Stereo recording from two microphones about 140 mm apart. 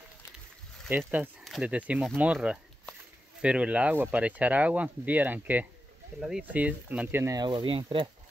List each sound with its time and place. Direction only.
0.8 s speech: 15° right (ahead or behind)
7.3 s speech: 35° right (ahead or behind)